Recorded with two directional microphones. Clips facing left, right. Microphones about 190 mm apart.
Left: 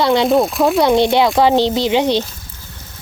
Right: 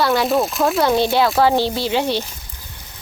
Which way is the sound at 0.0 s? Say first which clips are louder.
Left 4 dB; 20° left (ahead or behind).